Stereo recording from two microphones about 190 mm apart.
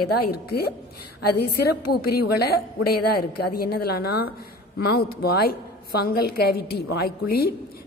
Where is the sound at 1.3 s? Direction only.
55° left (ahead or behind).